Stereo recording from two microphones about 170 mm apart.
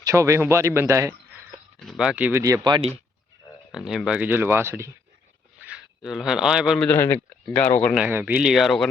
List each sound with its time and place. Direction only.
0.0 s a man's voice: 15° right (ahead or behind)
1.8 s speech: centre (ahead or behind)
2.4 s speech: 20° right (ahead or behind)
3.7 s a man's voice: centre (ahead or behind)
6.8 s speech: 15° left (ahead or behind)
8.0 s speech: 10° right (ahead or behind)